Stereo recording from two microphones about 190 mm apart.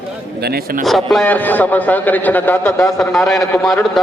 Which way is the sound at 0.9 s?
Centre (ahead or behind).